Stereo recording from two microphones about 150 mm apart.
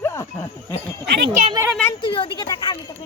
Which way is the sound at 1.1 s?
80° right.